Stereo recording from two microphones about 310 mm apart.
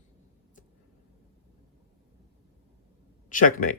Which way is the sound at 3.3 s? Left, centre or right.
Left.